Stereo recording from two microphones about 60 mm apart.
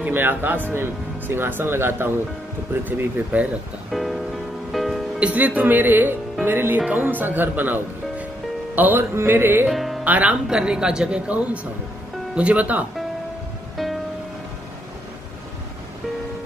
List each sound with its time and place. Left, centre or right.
0.0 s speech: right
3.3 s speech: right
3.9 s music: centre
5.2 s speech: right
8.7 s music: right
9.1 s speech: right
9.7 s speech: centre
10.0 s speech: right
10.5 s speech: centre